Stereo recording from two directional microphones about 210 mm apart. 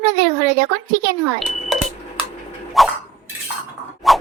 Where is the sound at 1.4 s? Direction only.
Centre (ahead or behind).